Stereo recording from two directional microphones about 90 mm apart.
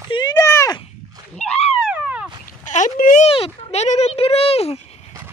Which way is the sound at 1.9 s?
15° right (ahead or behind).